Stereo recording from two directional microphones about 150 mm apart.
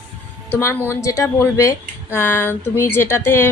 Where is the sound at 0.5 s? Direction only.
15° left (ahead or behind).